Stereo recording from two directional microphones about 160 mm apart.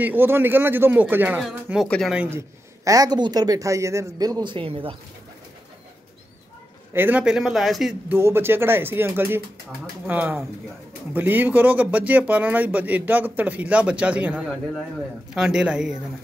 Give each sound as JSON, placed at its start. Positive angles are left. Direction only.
{"t": 0.0, "sound": "a man's voice", "side_deg": -10}
{"t": 2.1, "sound": "a man's voice", "side_deg": -15}
{"t": 6.9, "sound": "a man's voice", "side_deg": -10}
{"t": 8.1, "sound": "a man's voice", "side_deg": -15}